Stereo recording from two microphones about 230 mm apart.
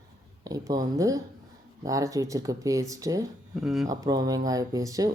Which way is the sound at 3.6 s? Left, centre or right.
Centre.